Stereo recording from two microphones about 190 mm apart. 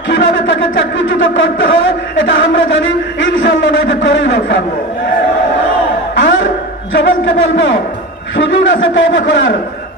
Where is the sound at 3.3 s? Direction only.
85° left.